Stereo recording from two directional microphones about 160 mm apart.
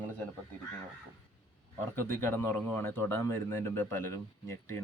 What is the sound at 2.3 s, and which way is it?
Speech, 15° left (ahead or behind).